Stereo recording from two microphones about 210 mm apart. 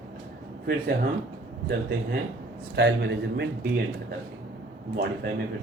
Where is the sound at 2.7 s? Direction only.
55° right (ahead or behind).